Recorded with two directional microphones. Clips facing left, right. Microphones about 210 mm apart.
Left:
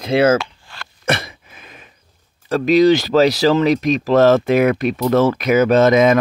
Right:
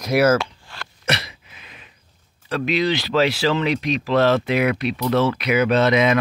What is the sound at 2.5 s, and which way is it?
Speech, 45° left (ahead or behind).